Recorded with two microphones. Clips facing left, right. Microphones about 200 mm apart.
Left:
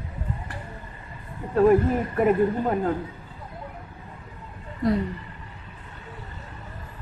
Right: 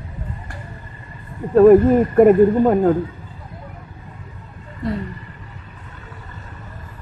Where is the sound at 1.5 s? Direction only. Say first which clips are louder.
Right 9 dB; 50° right (ahead or behind).